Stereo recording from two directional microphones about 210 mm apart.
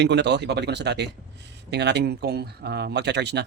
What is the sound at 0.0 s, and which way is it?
Speech, 55° right (ahead or behind).